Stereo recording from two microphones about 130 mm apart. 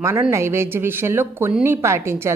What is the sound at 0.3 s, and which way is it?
A woman's voice, 20° right (ahead or behind).